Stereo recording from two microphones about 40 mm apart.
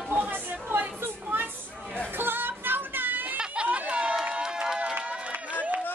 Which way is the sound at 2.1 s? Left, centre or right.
Right.